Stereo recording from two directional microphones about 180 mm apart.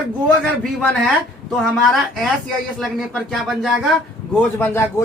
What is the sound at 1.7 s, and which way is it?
A man's voice, centre (ahead or behind).